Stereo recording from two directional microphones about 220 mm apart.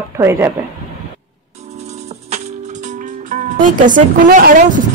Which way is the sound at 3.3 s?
35° right (ahead or behind).